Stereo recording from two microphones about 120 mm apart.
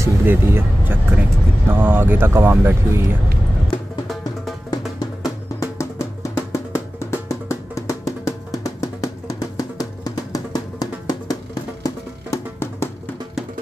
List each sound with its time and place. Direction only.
0.0 s speech: 20° right (ahead or behind)
4.6 s music: 30° left (ahead or behind)